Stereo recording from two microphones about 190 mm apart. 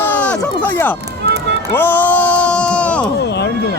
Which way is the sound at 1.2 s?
60° right (ahead or behind).